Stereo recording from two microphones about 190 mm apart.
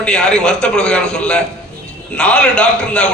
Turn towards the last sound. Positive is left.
turn(degrees=5)  # may be behind; listen again after turning